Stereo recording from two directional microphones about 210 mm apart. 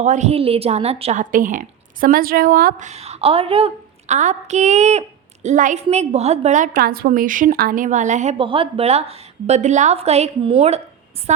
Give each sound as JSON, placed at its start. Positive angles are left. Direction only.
{"t": 0.0, "sound": "a woman's voice", "side_deg": -35}